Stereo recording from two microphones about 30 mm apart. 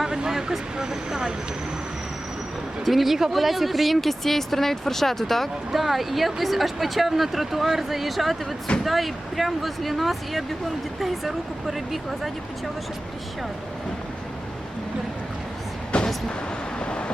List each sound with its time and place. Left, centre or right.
0.3 s speech: centre
2.8 s speech: centre
5.7 s speech: centre
16.8 s vehicle: left